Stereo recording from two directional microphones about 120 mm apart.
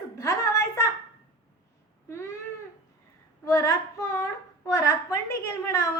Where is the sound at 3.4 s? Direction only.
25° left (ahead or behind).